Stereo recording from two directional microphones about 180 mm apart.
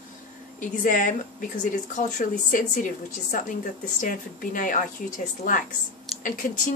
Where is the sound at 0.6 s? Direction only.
45° left (ahead or behind).